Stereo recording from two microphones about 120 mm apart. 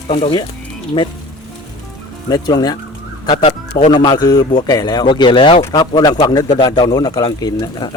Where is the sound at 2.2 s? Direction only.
35° left (ahead or behind).